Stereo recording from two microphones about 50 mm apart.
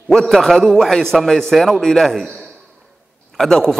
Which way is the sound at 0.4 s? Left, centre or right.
Centre.